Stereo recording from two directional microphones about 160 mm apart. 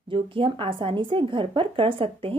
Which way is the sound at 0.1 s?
35° right (ahead or behind).